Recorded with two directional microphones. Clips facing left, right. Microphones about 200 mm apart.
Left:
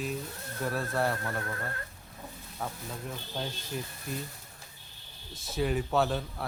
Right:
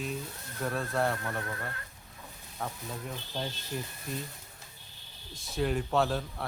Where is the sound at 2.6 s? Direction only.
5° left (ahead or behind).